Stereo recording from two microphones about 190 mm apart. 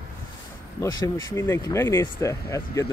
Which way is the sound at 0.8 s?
15° left (ahead or behind).